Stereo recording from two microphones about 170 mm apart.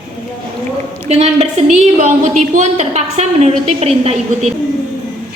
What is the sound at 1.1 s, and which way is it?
A woman's voice, 40° right (ahead or behind).